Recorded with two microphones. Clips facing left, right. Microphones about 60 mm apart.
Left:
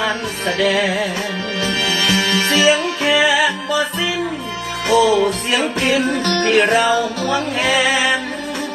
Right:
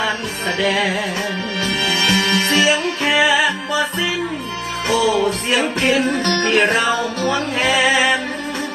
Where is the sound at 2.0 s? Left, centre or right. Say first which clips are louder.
Even; right.